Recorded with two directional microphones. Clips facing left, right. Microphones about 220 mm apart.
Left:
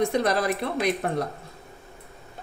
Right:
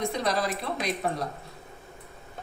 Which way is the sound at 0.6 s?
70° left (ahead or behind).